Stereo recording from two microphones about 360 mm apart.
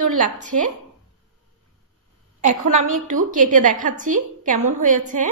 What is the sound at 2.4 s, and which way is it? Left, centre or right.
Speech, right.